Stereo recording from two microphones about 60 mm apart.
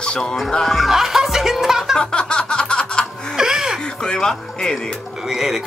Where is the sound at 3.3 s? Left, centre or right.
Centre.